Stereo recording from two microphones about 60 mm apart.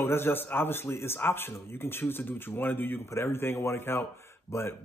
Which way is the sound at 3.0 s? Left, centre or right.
Left.